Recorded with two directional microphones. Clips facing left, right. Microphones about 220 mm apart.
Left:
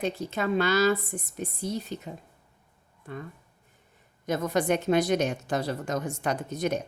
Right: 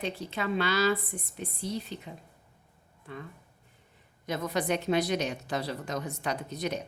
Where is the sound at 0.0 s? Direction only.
45° left (ahead or behind).